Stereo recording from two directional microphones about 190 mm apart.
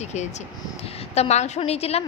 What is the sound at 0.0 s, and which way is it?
A woman's voice, 35° left (ahead or behind).